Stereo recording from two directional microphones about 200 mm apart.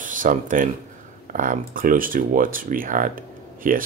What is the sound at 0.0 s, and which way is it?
Speech, 40° right (ahead or behind).